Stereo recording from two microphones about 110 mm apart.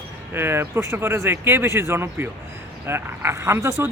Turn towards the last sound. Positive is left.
turn(degrees=-25)  # may be behind; listen again after turning